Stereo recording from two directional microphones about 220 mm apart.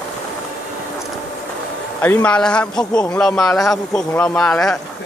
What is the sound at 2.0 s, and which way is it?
Speech, 10° left (ahead or behind).